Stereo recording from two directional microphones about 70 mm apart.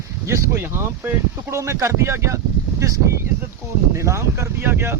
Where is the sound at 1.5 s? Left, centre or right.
Right.